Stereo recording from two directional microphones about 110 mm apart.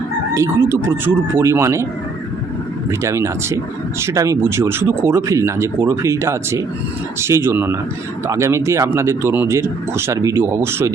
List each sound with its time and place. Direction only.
0.3 s speech: 25° right (ahead or behind)
3.0 s speech: 25° right (ahead or behind)